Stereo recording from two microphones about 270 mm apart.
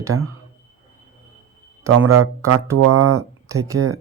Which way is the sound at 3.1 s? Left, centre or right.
Centre.